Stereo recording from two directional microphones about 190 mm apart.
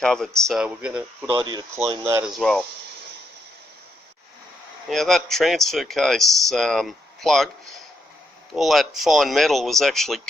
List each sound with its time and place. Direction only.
0.0 s speech: 5° left (ahead or behind)
1.4 s speech: 20° right (ahead or behind)
2.2 s speech: centre (ahead or behind)
4.9 s speech: centre (ahead or behind)